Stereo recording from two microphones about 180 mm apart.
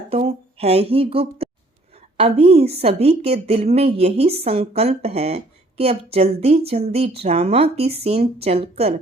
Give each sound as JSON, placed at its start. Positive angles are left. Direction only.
{"t": 0.1, "sound": "a woman's voice", "side_deg": -35}